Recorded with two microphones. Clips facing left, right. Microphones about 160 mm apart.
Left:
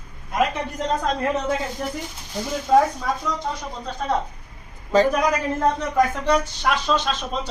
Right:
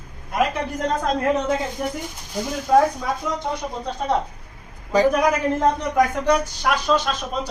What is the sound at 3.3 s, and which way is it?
Speech, 20° right (ahead or behind).